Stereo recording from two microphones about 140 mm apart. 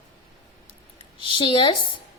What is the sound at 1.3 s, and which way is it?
Speech, 35° left (ahead or behind).